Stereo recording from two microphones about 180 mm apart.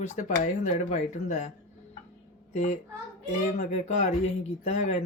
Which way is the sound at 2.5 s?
40° left (ahead or behind).